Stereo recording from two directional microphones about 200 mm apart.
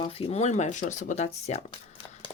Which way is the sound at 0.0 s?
30° left (ahead or behind).